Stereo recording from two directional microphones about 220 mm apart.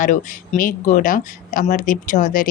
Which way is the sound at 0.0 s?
40° left (ahead or behind).